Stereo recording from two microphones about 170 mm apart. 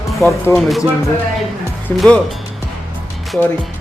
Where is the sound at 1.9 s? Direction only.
Centre (ahead or behind).